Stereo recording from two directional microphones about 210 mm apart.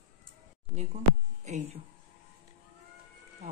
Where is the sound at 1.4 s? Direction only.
35° right (ahead or behind).